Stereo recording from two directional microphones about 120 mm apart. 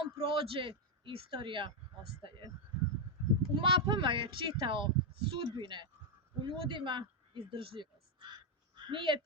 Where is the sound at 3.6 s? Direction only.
45° right (ahead or behind).